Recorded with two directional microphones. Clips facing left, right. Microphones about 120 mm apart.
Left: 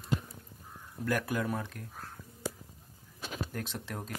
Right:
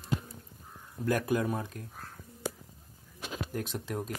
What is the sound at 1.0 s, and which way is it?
Speech, 20° right (ahead or behind).